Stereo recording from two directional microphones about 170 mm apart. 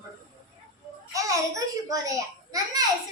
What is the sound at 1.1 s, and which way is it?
A child's voice, 20° right (ahead or behind).